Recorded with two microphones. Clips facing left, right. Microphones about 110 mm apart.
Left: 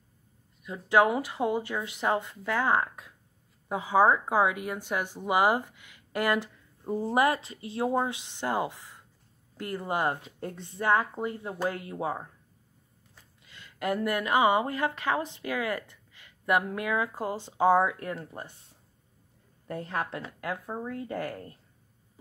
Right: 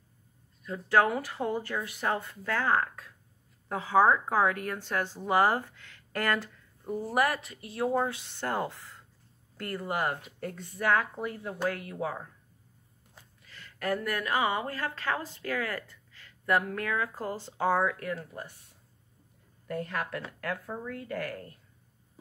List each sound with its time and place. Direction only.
0.7 s speech: 15° left (ahead or behind)
13.4 s a sound: 20° left (ahead or behind)
14.0 s speech: 20° left (ahead or behind)
19.7 s speech: 30° left (ahead or behind)